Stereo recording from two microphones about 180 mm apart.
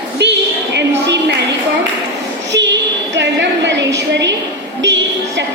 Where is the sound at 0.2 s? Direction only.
70° right (ahead or behind).